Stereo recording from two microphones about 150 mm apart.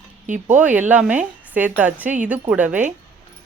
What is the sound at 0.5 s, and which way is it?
A woman's voice, 10° right (ahead or behind).